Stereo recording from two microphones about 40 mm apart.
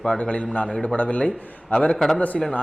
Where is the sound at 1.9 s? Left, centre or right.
Centre.